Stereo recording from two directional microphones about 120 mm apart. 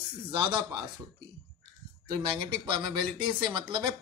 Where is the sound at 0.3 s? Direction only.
40° right (ahead or behind).